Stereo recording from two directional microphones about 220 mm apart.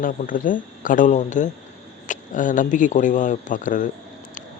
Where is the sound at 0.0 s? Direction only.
40° left (ahead or behind).